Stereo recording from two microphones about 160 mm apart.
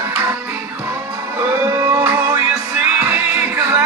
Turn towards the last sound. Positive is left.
turn(degrees=-15)  # may be behind; listen again after turning